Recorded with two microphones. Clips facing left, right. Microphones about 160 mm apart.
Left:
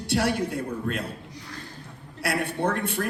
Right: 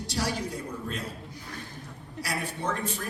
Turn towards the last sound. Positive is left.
turn(degrees=60)  # may be behind; listen again after turning